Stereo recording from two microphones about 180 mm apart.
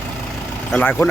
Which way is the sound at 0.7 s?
10° left (ahead or behind).